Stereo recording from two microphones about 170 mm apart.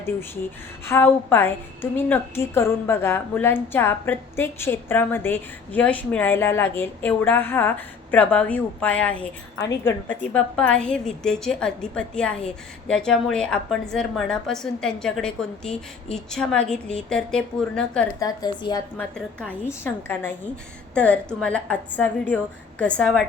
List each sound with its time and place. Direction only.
0.9 s a woman's voice: 15° left (ahead or behind)
18.2 s a woman's voice: 25° left (ahead or behind)
18.9 s a woman's voice: 5° left (ahead or behind)